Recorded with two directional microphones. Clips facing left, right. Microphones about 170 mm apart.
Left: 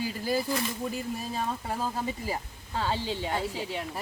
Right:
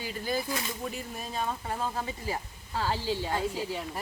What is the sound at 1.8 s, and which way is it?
Speech, 10° left (ahead or behind).